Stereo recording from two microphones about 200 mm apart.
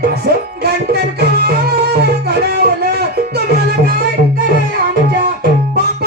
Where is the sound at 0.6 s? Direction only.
55° right (ahead or behind).